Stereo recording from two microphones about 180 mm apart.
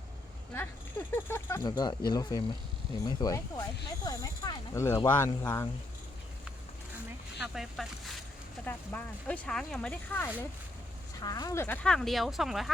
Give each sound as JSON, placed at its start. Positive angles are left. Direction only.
{"t": 0.5, "sound": "speech", "side_deg": 10}
{"t": 7.3, "sound": "speech", "side_deg": -5}
{"t": 8.6, "sound": "speech", "side_deg": 10}
{"t": 11.2, "sound": "speech", "side_deg": 20}